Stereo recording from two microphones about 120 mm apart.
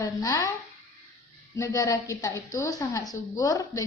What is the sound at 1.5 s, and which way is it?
A woman's voice, 25° left (ahead or behind).